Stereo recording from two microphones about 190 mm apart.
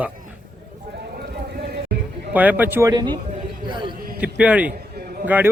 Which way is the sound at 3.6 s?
25° right (ahead or behind).